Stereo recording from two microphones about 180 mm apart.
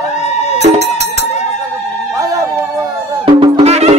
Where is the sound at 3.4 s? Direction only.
35° right (ahead or behind).